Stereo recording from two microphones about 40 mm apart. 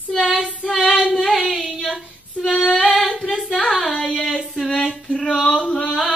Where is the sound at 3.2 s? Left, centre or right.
Centre.